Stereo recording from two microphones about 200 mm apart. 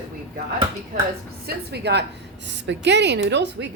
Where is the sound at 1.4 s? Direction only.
55° right (ahead or behind).